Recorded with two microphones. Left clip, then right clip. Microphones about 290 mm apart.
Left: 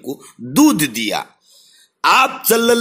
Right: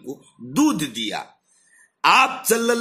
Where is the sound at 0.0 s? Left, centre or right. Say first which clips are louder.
Left 7 dB; centre.